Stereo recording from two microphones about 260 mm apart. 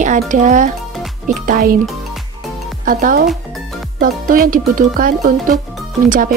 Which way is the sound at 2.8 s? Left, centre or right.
Right.